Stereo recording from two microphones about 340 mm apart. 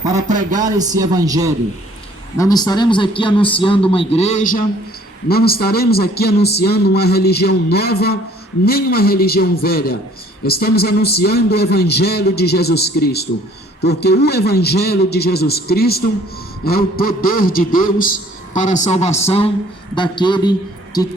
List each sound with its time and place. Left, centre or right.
0.3 s a man's voice: right
0.6 s a man's voice: centre
2.4 s a man's voice: centre